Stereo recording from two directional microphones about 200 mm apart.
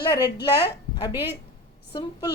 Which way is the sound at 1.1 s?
10° right (ahead or behind).